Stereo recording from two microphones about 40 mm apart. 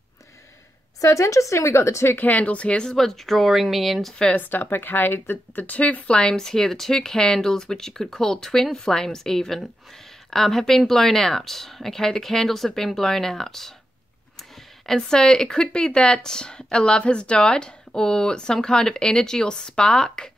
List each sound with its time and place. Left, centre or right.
2.1 s a woman's voice: left
2.8 s speech: centre
4.4 s speech: left
5.6 s a woman's voice: left
6.4 s speech: centre
14.9 s speech: centre